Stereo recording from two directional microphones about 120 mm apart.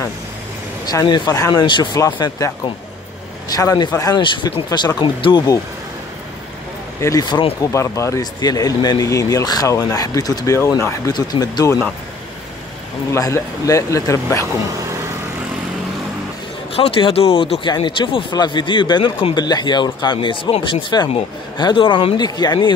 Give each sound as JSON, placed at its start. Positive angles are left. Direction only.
{"t": 1.0, "sound": "speech", "side_deg": 35}
{"t": 4.2, "sound": "speech", "side_deg": 40}
{"t": 7.0, "sound": "speech", "side_deg": 25}
{"t": 13.1, "sound": "speech", "side_deg": 25}
{"t": 16.7, "sound": "speech", "side_deg": 55}